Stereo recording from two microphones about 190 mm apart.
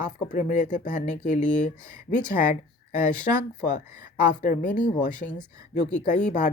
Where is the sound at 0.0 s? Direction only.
40° left (ahead or behind).